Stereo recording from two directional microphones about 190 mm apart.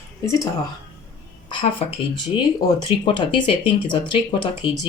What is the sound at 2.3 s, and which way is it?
Speech, 25° left (ahead or behind).